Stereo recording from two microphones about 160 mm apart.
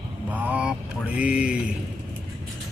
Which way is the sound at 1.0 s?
5° right (ahead or behind).